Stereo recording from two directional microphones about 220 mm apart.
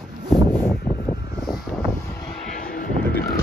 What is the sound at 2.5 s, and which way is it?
Vehicle, 40° left (ahead or behind).